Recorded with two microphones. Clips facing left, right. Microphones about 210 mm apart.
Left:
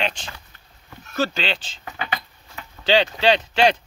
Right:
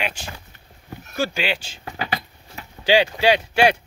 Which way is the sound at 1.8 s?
35° right (ahead or behind).